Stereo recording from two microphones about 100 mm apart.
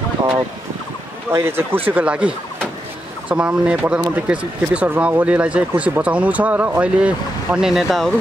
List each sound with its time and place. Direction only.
1.3 s speech: 25° right (ahead or behind); by 8.1 s centre (ahead or behind)